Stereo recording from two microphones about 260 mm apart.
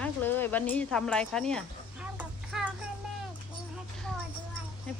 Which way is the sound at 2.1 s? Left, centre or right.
Centre.